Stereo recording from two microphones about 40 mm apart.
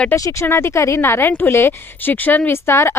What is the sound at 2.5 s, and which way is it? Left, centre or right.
Speech, left.